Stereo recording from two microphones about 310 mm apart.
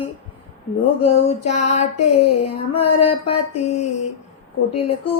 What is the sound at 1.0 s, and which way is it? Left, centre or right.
Female singing, left.